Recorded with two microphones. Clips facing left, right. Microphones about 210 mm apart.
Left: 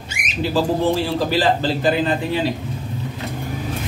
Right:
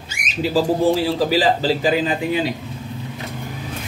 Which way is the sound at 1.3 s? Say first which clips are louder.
Right 1 dB; 10° right (ahead or behind).